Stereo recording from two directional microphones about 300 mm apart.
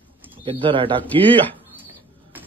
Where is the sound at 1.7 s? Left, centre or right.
Centre.